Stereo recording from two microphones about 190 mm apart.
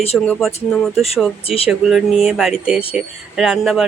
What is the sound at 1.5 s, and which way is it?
Speech, 30° left (ahead or behind).